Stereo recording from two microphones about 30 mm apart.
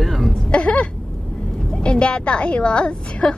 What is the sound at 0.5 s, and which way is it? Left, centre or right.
A woman's voice, left.